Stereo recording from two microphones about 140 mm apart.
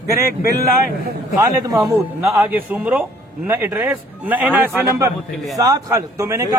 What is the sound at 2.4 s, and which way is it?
A man's voice, 10° right (ahead or behind).